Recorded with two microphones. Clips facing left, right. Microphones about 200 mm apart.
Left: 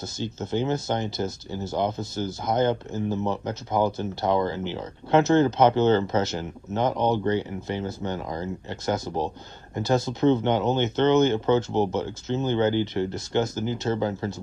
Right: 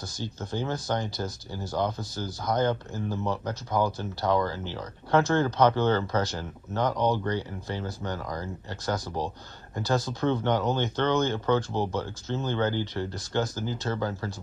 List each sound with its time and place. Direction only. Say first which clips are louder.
0.0 s speech: left 5 dB; 20° left (ahead or behind)